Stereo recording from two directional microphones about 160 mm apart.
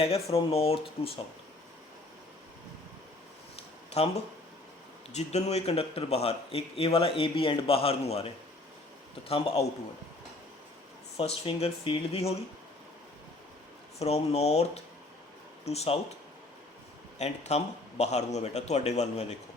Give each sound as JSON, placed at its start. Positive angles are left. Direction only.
{"t": 0.0, "sound": "speech", "side_deg": 40}
{"t": 3.5, "sound": "a sound", "side_deg": 40}
{"t": 5.1, "sound": "speech", "side_deg": 45}
{"t": 9.3, "sound": "speech", "side_deg": 35}
{"t": 11.2, "sound": "speech", "side_deg": 40}
{"t": 14.0, "sound": "speech", "side_deg": 40}
{"t": 17.2, "sound": "a man's voice", "side_deg": 45}